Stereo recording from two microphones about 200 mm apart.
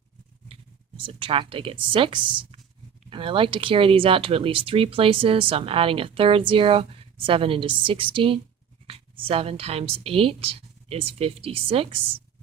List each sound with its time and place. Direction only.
0.4 s speech: 25° right (ahead or behind)